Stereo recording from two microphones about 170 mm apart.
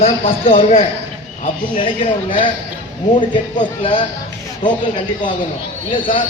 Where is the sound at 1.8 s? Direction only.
30° left (ahead or behind).